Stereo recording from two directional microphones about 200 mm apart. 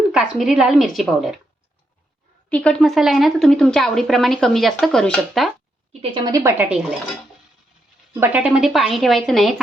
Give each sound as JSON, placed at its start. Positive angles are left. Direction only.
{"t": 0.1, "sound": "a woman's voice", "side_deg": -5}
{"t": 2.5, "sound": "a woman's voice", "side_deg": 5}
{"t": 6.0, "sound": "a woman's voice", "side_deg": -25}
{"t": 8.1, "sound": "a woman's voice", "side_deg": -10}